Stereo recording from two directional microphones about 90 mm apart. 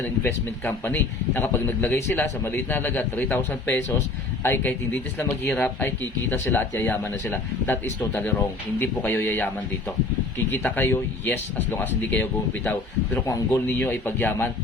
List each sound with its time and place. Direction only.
0.2 s speech: 25° left (ahead or behind)
10.5 s speech: 25° left (ahead or behind)
13.1 s speech: 35° left (ahead or behind)
13.7 s speech: 20° left (ahead or behind)